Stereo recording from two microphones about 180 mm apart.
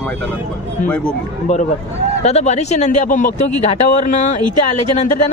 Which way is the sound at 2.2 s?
40° left (ahead or behind).